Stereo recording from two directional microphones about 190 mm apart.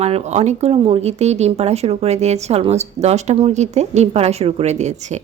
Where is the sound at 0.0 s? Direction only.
35° right (ahead or behind).